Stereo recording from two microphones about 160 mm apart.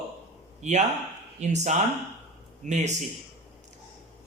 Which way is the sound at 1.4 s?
45° right (ahead or behind).